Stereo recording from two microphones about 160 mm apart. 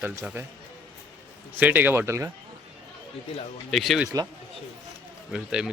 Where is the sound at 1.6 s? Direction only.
10° right (ahead or behind).